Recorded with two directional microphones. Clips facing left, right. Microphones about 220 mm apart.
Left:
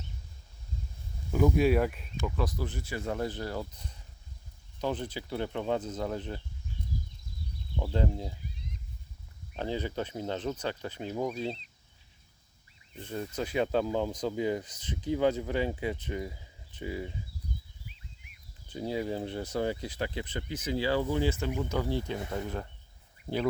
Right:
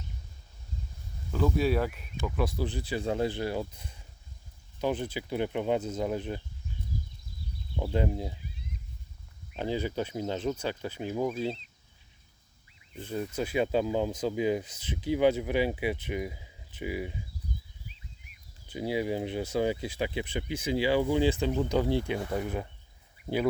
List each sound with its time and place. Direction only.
1.3 s speech: 15° left (ahead or behind); by 2.6 s 10° right (ahead or behind)
2.6 s speech: 30° right (ahead or behind)
4.8 s speech: 10° right (ahead or behind)
7.8 s speech: 15° right (ahead or behind)
9.6 s speech: 10° right (ahead or behind)
13.0 s speech: 10° right (ahead or behind)
18.7 s speech: 10° right (ahead or behind)